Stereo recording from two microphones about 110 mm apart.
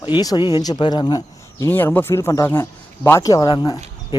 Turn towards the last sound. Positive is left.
turn(degrees=35)  # may be behind; listen again after turning